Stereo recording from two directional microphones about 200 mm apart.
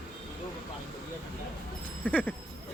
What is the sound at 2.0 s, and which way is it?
Speech, 5° left (ahead or behind).